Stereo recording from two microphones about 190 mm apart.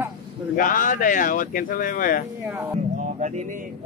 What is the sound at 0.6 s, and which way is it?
Speech, 45° left (ahead or behind).